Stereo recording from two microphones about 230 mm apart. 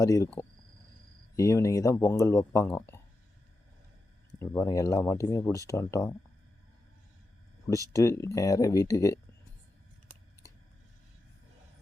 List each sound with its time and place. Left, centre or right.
0.0 s speech: centre
1.4 s speech: centre
4.4 s speech: centre
7.9 s speech: centre